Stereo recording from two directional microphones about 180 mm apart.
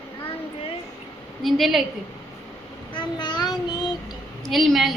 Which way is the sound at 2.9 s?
25° left (ahead or behind).